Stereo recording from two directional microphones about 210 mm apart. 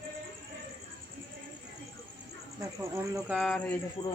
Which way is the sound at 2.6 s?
15° right (ahead or behind).